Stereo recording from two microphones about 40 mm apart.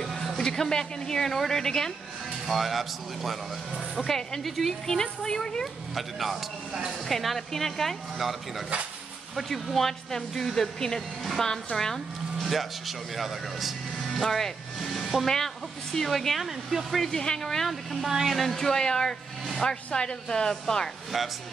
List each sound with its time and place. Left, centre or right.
0.0 s a woman's voice: centre
2.4 s speech: centre
4.0 s speech: centre
4.4 s speech: centre
4.8 s speech: centre
5.9 s speech: centre
12.4 s speech: centre
16.4 s speech: centre
17.0 s speech: centre
18.0 s speech: centre
18.4 s speech: centre